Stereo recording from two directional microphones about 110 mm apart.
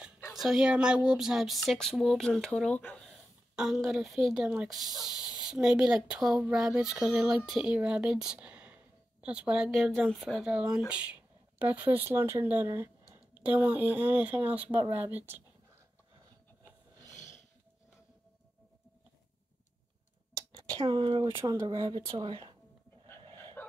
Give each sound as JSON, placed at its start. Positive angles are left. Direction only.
{"t": 0.3, "sound": "speech", "side_deg": -5}
{"t": 3.1, "sound": "a sound", "side_deg": 0}
{"t": 4.3, "sound": "speech", "side_deg": -5}
{"t": 9.7, "sound": "speech", "side_deg": 0}
{"t": 20.3, "sound": "a sound", "side_deg": -40}
{"t": 21.5, "sound": "speech", "side_deg": -35}